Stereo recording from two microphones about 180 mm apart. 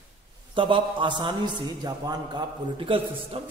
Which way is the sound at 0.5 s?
30° right (ahead or behind).